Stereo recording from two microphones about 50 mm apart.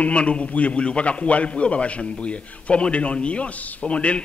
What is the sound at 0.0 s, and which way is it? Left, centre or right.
A man's voice, left.